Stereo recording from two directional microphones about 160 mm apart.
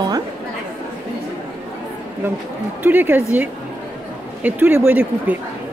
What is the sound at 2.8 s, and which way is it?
Speech, 10° right (ahead or behind).